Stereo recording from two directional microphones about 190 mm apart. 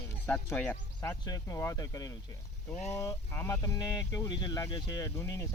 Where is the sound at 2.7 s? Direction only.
35° left (ahead or behind).